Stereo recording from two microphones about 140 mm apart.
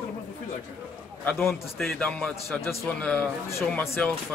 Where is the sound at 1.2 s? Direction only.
5° left (ahead or behind).